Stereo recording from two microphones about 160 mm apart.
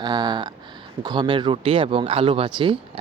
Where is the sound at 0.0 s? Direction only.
25° right (ahead or behind).